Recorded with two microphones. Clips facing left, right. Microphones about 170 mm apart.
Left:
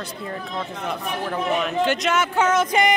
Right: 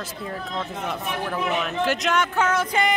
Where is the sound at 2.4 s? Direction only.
20° left (ahead or behind).